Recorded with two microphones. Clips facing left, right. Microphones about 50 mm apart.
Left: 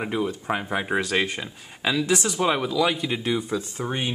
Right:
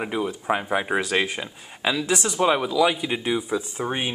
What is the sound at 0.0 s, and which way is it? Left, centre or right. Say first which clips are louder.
Speech: even; centre.